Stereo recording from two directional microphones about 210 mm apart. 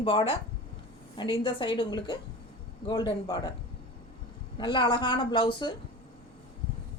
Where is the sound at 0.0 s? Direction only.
25° left (ahead or behind).